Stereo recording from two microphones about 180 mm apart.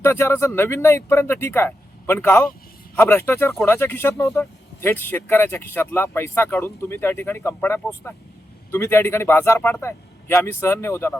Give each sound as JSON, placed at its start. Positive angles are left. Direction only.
{"t": 0.0, "sound": "speech", "side_deg": 15}